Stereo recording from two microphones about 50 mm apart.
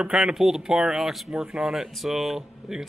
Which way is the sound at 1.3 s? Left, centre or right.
Centre.